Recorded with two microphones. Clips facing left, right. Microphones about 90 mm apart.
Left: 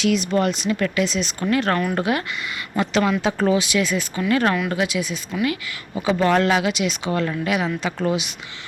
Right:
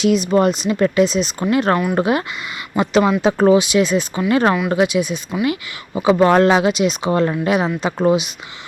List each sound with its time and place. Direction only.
0.0 s speech: 20° right (ahead or behind)
7.7 s speech: 20° right (ahead or behind)